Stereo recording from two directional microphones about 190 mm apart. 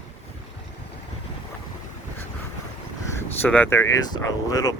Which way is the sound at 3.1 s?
10° left (ahead or behind).